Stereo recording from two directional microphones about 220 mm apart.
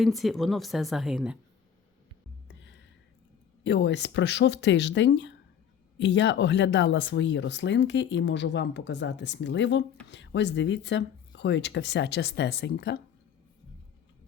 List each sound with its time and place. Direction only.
0.0 s speech: centre (ahead or behind)
2.5 s music: 55° left (ahead or behind)
3.6 s speech: 50° left (ahead or behind)